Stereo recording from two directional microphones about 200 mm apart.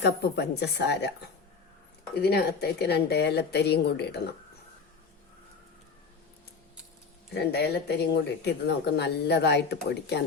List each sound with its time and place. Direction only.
0.0 s speech: 55° left (ahead or behind)
2.2 s speech: 55° left (ahead or behind)
7.3 s speech: 55° left (ahead or behind)